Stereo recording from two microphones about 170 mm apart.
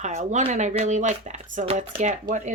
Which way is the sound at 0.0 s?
40° right (ahead or behind).